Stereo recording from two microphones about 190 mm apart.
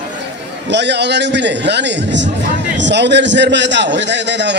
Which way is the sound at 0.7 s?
65° right (ahead or behind).